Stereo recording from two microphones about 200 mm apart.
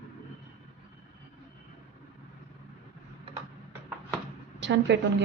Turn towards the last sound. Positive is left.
turn(degrees=-60)  # may be behind; listen again after turning